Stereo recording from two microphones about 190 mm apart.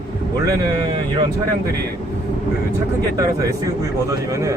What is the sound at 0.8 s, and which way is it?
Speech, 25° right (ahead or behind).